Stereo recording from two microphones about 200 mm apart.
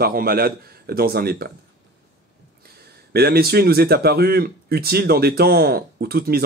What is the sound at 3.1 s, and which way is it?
Speech, 50° right (ahead or behind).